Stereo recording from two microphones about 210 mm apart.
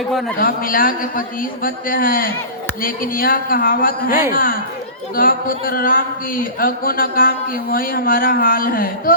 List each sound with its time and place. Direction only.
0.0 s a man's voice: centre (ahead or behind)
0.3 s a man's voice: 40° left (ahead or behind)